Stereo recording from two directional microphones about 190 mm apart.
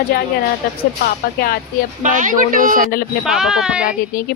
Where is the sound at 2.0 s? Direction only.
45° right (ahead or behind).